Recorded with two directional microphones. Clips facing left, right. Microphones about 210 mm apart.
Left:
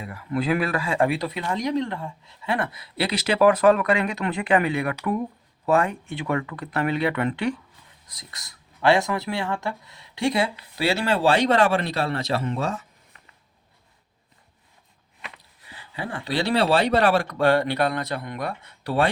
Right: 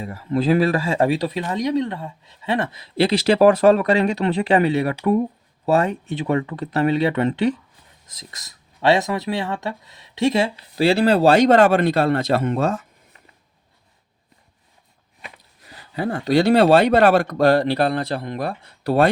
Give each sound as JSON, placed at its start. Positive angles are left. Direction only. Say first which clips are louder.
{"t": 0.0, "sound": "speech", "louder": "right 5 dB", "side_deg": -30}
{"t": 15.6, "sound": "speech", "louder": "right 9 dB", "side_deg": -40}